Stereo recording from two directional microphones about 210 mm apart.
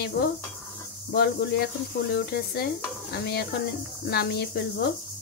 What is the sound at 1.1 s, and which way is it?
Sizzle, 50° left (ahead or behind).